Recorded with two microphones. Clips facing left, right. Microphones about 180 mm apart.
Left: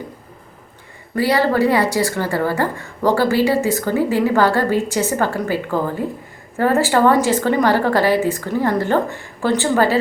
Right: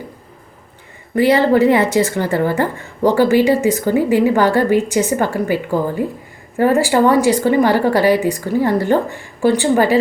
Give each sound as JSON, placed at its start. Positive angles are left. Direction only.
{"t": 1.1, "sound": "speech", "side_deg": -20}